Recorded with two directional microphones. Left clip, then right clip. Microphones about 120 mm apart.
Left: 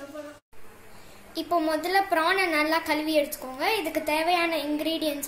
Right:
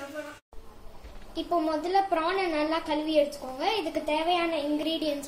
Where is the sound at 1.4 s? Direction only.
Centre (ahead or behind).